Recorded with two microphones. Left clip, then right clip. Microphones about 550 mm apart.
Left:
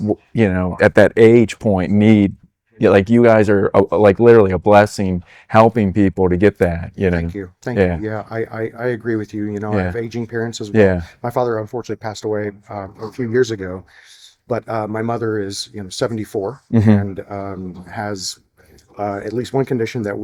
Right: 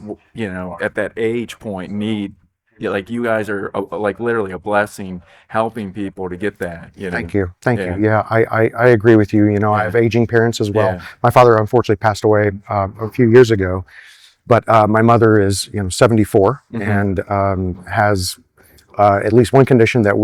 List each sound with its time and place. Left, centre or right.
0.3 s speech: left
2.7 s speech: left
5.5 s speech: left
7.2 s speech: right
10.8 s speech: left
11.2 s speech: right